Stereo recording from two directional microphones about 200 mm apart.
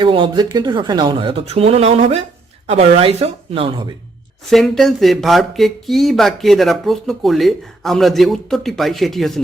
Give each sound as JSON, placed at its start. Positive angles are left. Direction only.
{"t": 0.0, "sound": "speech", "side_deg": -25}
{"t": 4.4, "sound": "speech", "side_deg": 0}